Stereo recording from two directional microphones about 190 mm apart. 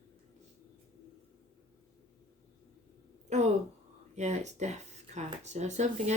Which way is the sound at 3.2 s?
35° right (ahead or behind).